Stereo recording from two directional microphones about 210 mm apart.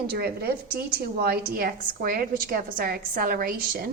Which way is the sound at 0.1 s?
45° right (ahead or behind).